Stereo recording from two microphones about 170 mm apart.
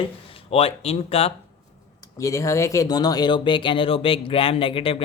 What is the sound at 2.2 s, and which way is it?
Speech, 20° left (ahead or behind).